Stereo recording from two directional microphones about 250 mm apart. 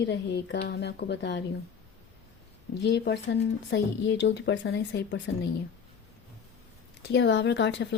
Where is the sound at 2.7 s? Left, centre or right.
Left.